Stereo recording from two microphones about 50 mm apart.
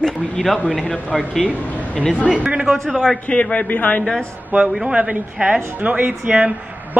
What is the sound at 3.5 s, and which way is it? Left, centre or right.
Speech, left.